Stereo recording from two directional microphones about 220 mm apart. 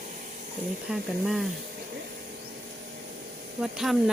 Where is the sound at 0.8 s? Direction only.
Centre (ahead or behind).